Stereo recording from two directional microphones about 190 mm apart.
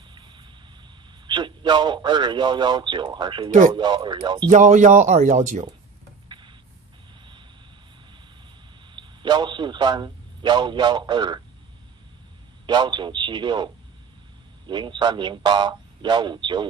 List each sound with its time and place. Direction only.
1.2 s a man's voice: 25° right (ahead or behind)
4.5 s speech: 40° right (ahead or behind)
6.2 s a sound: 25° right (ahead or behind)
8.9 s a man's voice: 25° right (ahead or behind)
12.6 s a man's voice: 25° right (ahead or behind)
14.7 s a man's voice: 25° right (ahead or behind)